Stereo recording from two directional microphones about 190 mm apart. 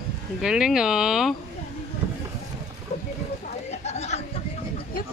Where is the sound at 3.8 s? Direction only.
35° left (ahead or behind).